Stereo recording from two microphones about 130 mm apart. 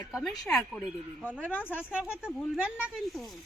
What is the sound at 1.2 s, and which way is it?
Speech, 10° right (ahead or behind).